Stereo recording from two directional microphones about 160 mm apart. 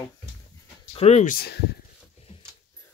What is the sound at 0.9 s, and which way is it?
Speech, 45° left (ahead or behind).